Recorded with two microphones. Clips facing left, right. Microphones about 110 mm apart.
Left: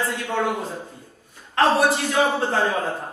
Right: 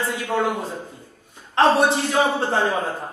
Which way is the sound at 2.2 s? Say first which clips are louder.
Left 1 dB; centre (ahead or behind).